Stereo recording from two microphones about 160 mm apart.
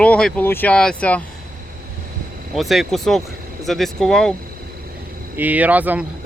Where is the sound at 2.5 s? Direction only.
Centre (ahead or behind).